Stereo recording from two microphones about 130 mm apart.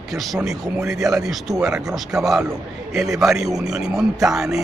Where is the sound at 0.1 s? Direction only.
Centre (ahead or behind).